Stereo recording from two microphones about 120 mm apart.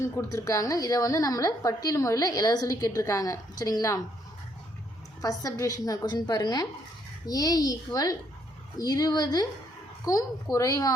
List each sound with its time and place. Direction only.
0.0 s a woman's voice: 25° left (ahead or behind)
5.2 s a woman's voice: 30° left (ahead or behind)